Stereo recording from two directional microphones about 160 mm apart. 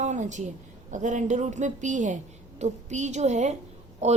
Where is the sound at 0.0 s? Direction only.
50° right (ahead or behind).